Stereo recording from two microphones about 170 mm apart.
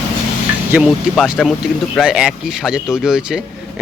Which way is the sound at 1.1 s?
Centre (ahead or behind).